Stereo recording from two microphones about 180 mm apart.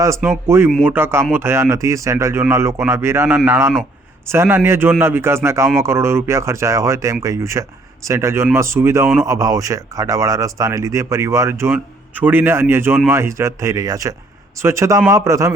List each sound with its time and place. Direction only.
0.0 s speech: 15° right (ahead or behind)